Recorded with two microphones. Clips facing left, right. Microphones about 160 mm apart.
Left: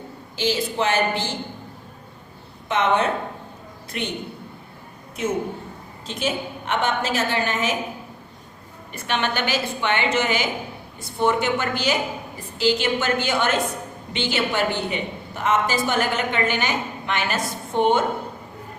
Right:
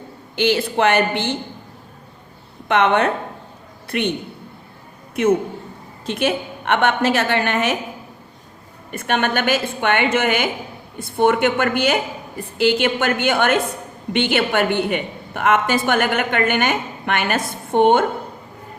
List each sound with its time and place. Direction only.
0.3 s a woman's voice: 60° right (ahead or behind)
2.6 s a woman's voice: 65° right (ahead or behind)
6.1 s a woman's voice: 60° right (ahead or behind)
8.9 s a woman's voice: 50° right (ahead or behind)